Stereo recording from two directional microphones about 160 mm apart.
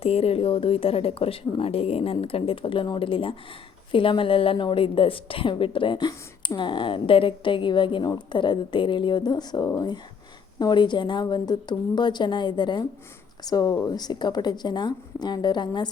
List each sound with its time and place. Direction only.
0.0 s a woman's voice: 40° left (ahead or behind)